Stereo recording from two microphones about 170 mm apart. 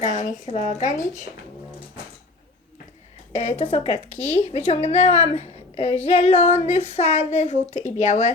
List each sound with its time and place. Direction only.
0.0 s speech: 45° left (ahead or behind)
3.4 s a woman's voice: 40° left (ahead or behind)